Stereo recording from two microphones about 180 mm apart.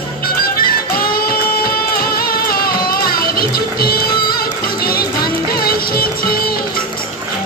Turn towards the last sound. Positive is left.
turn(degrees=55)  # may be behind; listen again after turning